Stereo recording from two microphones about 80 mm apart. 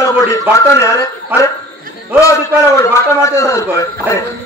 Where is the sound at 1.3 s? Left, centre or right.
Right.